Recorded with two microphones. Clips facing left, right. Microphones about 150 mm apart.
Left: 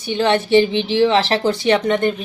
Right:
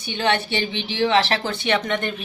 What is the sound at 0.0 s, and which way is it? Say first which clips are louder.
Speech: left 5 dB; 35° left (ahead or behind).